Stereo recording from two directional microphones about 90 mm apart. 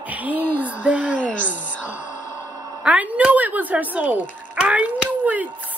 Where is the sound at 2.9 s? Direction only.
15° right (ahead or behind).